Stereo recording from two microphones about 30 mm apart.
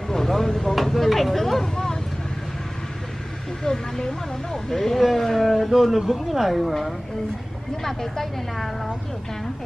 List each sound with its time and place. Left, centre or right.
0.1 s a sound: centre
0.8 s vehicle: centre
3.6 s speech: left
4.6 s a woman's voice: centre
7.8 s a woman's voice: centre